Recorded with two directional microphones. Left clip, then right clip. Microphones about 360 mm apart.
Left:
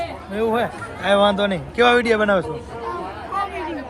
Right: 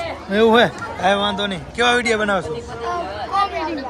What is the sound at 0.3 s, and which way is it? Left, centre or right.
Speech, right.